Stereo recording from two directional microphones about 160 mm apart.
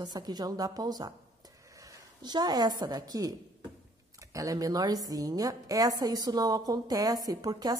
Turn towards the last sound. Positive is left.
turn(degrees=-25)  # may be behind; listen again after turning